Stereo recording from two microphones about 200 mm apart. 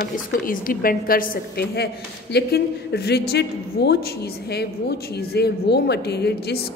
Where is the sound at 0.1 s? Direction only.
45° left (ahead or behind).